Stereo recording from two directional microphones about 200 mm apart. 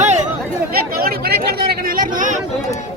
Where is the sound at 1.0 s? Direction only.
50° right (ahead or behind).